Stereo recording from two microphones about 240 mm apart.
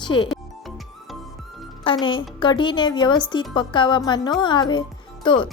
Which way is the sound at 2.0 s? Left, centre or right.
Centre.